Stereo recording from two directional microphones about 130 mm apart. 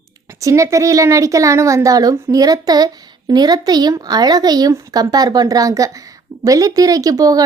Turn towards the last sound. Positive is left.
turn(degrees=-30)  # may be behind; listen again after turning